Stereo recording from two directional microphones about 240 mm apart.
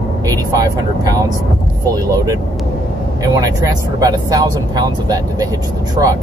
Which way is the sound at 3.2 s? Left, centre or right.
Centre.